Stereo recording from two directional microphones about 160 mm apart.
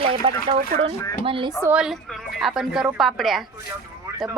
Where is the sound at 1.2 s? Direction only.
35° right (ahead or behind).